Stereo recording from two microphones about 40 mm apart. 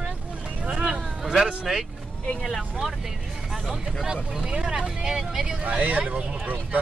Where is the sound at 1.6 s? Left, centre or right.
Centre.